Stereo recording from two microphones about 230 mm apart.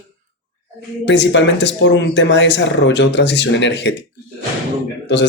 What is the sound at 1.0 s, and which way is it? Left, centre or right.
Speech, left.